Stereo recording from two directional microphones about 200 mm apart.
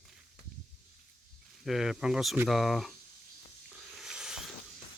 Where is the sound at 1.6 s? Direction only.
Centre (ahead or behind).